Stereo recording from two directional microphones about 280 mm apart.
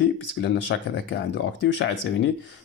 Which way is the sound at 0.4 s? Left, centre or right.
Left.